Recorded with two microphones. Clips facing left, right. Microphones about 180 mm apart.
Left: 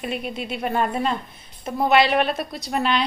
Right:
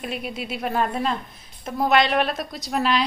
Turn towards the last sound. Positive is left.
turn(degrees=0)  # may be behind; listen again after turning